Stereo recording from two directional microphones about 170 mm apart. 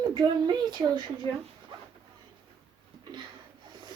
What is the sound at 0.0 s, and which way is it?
A woman's voice, 25° right (ahead or behind).